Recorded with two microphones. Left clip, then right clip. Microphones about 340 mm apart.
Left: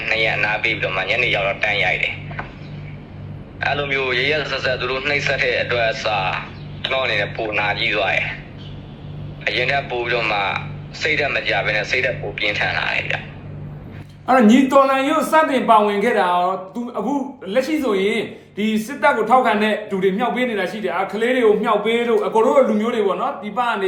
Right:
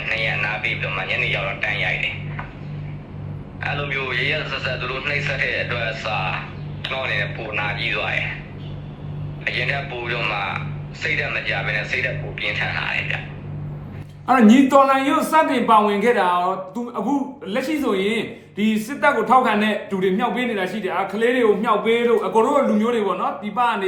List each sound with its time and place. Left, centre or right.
0.0 s speech: left
3.8 s a man's voice: left
9.6 s a man's voice: left
14.3 s a man's voice: centre